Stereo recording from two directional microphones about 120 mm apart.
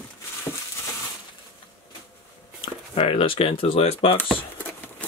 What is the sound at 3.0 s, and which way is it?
Speech, 50° left (ahead or behind).